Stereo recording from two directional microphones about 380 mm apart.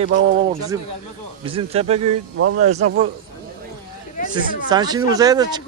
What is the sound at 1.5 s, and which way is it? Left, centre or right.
Speech, centre.